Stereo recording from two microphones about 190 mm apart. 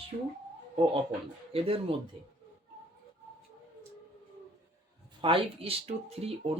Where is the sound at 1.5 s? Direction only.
30° right (ahead or behind).